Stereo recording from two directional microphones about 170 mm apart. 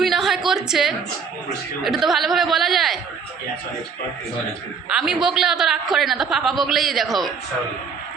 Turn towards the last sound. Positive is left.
turn(degrees=0)  # may be behind; listen again after turning